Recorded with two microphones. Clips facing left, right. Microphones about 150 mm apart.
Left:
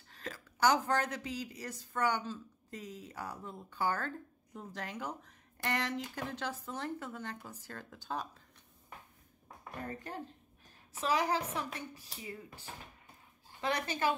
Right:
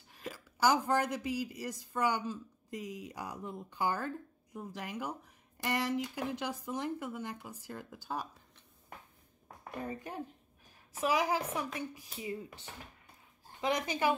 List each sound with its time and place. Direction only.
0.1 s a woman's voice: 10° right (ahead or behind)
9.8 s a woman's voice: 10° right (ahead or behind)
13.6 s a woman's voice: 15° right (ahead or behind)